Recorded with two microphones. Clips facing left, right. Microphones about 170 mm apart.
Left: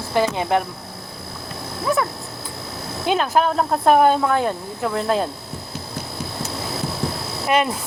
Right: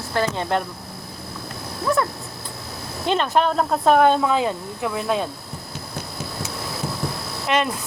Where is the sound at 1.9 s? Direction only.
5° left (ahead or behind).